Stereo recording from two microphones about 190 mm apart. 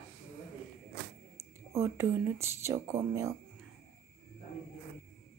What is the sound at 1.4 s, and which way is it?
Speech, 15° right (ahead or behind).